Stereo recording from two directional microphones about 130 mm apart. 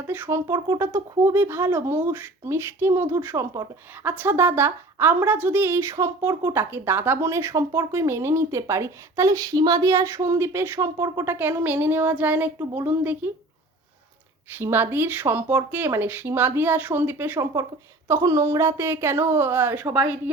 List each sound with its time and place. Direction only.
0.1 s a woman's voice: 20° right (ahead or behind)
14.6 s a woman's voice: 20° right (ahead or behind)